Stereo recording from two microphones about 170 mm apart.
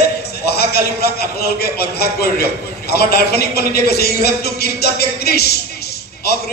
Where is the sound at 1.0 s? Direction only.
65° left (ahead or behind).